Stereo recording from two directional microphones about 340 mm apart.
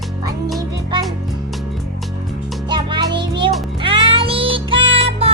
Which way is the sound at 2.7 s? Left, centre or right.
Centre.